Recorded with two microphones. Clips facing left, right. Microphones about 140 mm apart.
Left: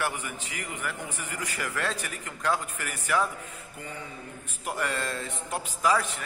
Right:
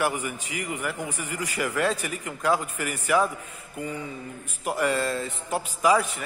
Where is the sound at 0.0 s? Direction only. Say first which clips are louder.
Right 5 dB; 10° right (ahead or behind).